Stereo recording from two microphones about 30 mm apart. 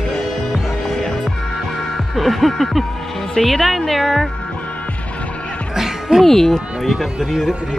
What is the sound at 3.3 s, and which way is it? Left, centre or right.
Speech, centre.